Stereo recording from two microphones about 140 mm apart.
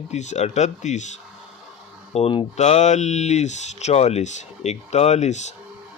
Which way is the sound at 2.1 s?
45° left (ahead or behind).